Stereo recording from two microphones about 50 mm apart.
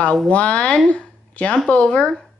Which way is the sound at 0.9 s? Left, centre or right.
Left.